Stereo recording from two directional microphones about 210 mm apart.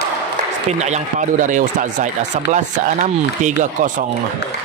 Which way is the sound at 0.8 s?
35° right (ahead or behind).